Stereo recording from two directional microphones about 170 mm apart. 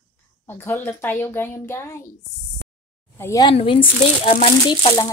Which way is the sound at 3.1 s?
20° left (ahead or behind).